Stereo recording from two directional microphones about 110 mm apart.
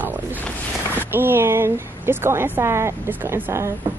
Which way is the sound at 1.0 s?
20° right (ahead or behind).